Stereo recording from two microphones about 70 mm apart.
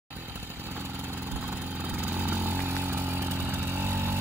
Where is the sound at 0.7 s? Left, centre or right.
Right.